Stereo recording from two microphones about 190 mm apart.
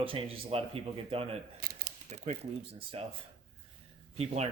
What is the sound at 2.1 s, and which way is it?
Speech, 35° right (ahead or behind).